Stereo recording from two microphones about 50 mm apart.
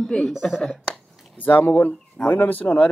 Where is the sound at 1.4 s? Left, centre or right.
Left.